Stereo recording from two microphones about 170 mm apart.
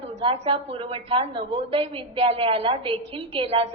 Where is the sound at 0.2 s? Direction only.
35° right (ahead or behind).